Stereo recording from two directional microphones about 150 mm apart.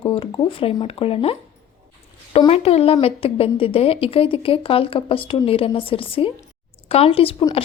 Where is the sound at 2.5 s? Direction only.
45° left (ahead or behind).